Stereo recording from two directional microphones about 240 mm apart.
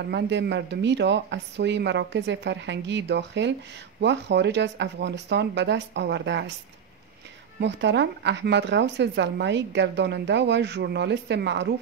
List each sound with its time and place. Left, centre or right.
0.0 s a woman's voice: right
7.6 s a woman's voice: right